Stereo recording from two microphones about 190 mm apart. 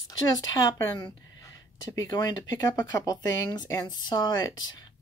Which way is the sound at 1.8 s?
20° left (ahead or behind).